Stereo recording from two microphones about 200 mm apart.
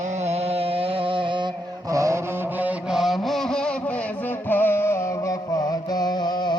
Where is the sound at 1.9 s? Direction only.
15° right (ahead or behind); by 3.7 s 5° left (ahead or behind).